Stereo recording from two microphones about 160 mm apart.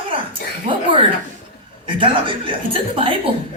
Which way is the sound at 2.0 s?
30° right (ahead or behind).